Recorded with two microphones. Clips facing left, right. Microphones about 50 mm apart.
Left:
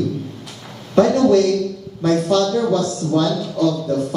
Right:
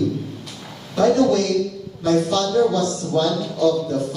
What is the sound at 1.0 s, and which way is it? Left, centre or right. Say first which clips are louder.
A man's voice: left 3 dB; left.